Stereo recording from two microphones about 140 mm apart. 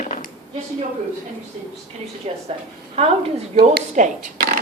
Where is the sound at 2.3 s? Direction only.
50° right (ahead or behind).